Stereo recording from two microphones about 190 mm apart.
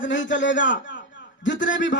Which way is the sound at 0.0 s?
75° left (ahead or behind).